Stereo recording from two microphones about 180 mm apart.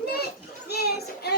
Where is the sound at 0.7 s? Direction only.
60° left (ahead or behind).